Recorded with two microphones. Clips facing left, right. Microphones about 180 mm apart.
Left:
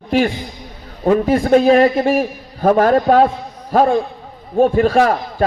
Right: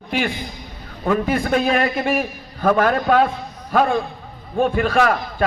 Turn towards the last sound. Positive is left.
turn(degrees=35)  # may be behind; listen again after turning